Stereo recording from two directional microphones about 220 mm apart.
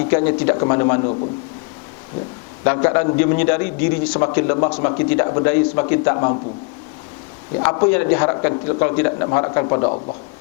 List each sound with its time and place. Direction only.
0.0 s a man's voice: 15° left (ahead or behind)
2.6 s a man's voice: 15° left (ahead or behind)
7.6 s a man's voice: 15° left (ahead or behind)